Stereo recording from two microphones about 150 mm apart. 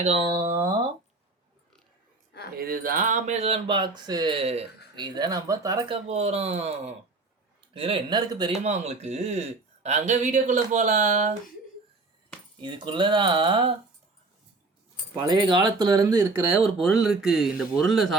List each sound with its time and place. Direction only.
0.0 s speech: 45° right (ahead or behind)
0.3 s speech: 25° right (ahead or behind)
2.6 s speech: 75° right (ahead or behind); by 4.6 s 40° right (ahead or behind)
4.9 s speech: 30° right (ahead or behind)
5.9 s speech: 45° right (ahead or behind)
8.5 s speech: 50° right (ahead or behind)
12.5 s speech: 30° right (ahead or behind)
15.1 s speech: 30° right (ahead or behind)
16.6 s speech: centre (ahead or behind)